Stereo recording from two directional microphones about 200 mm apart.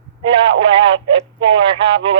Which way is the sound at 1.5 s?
25° right (ahead or behind).